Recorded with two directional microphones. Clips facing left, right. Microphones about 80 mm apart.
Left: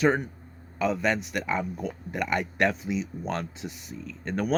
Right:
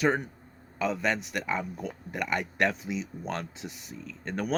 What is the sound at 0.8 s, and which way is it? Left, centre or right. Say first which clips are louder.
Speech: left 3 dB; centre.